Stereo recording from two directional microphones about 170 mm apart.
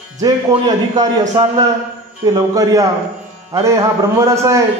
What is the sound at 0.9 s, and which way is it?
A man's voice, 25° right (ahead or behind).